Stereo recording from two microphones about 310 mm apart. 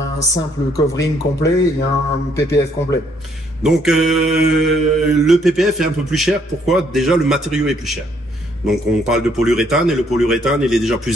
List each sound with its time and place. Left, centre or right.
0.2 s speech: centre
3.6 s speech: centre